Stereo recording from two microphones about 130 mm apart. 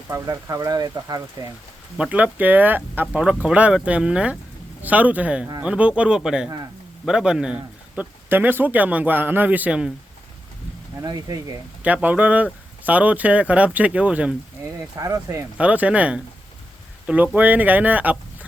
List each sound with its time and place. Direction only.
0.1 s speech: 25° right (ahead or behind)
2.0 s speech: 10° right (ahead or behind)
11.0 s speech: 30° right (ahead or behind)
11.8 s speech: 10° right (ahead or behind)
14.6 s speech: 25° right (ahead or behind)
15.5 s speech: 10° right (ahead or behind)
17.3 s speech: 15° right (ahead or behind)